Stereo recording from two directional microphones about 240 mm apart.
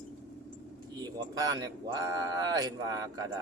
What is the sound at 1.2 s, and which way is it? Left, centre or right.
Speech, centre.